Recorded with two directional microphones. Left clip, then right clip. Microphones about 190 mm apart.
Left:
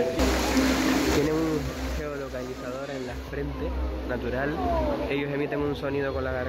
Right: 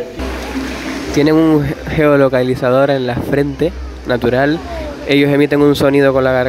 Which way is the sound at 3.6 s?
65° right (ahead or behind).